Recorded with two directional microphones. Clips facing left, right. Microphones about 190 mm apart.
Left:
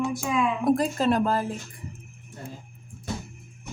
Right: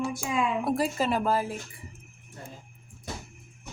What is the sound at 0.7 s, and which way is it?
Speech, 5° right (ahead or behind).